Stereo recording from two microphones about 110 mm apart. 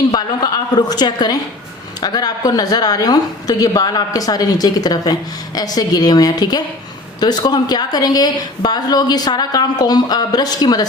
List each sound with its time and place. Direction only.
0.1 s a woman's voice: 40° left (ahead or behind)